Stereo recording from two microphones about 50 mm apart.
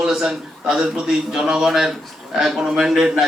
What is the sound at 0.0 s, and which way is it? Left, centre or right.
A man's voice, centre.